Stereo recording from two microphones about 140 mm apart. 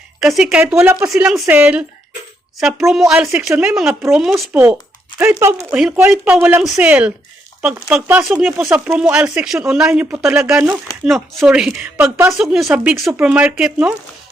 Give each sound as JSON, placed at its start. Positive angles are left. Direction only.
{"t": 0.2, "sound": "speech", "side_deg": -5}
{"t": 4.5, "sound": "speech", "side_deg": -15}